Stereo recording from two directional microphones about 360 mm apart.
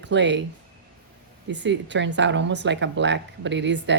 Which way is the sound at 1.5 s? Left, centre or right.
Right.